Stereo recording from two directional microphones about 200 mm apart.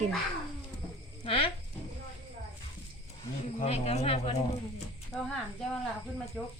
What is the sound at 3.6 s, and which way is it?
Speech, 30° left (ahead or behind).